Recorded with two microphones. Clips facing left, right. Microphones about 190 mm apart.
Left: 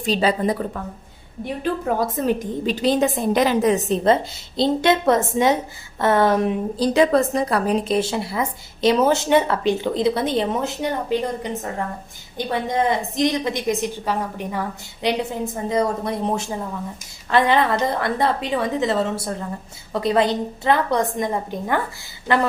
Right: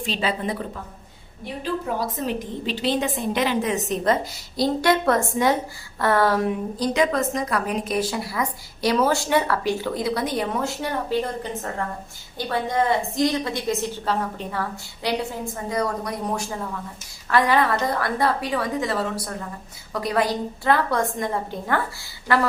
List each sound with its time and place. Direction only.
0.0 s a woman's voice: 40° left (ahead or behind)
1.6 s a woman's voice: 50° left (ahead or behind); by 6.5 s 20° left (ahead or behind)
6.7 s a woman's voice: 30° left (ahead or behind)